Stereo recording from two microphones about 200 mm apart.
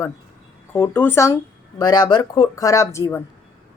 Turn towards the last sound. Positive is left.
turn(degrees=15)  # may be behind; listen again after turning